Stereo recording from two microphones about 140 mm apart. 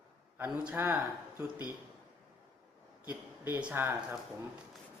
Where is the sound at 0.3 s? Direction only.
10° right (ahead or behind).